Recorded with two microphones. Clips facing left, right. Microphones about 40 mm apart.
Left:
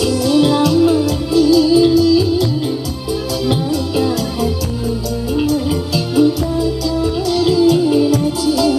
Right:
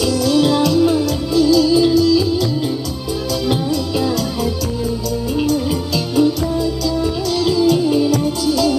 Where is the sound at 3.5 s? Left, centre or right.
Centre.